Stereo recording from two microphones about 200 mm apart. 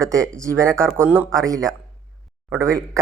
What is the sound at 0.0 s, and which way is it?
Speech, 15° right (ahead or behind).